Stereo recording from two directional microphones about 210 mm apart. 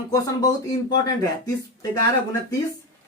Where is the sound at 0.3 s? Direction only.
15° left (ahead or behind).